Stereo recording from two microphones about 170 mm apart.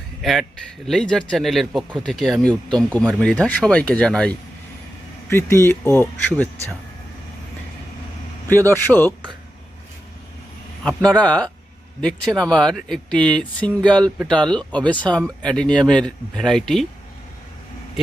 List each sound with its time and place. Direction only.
0.2 s speech: centre (ahead or behind)
5.3 s speech: 15° left (ahead or behind)
8.4 s speech: 10° left (ahead or behind)
11.2 s speech: 10° left (ahead or behind)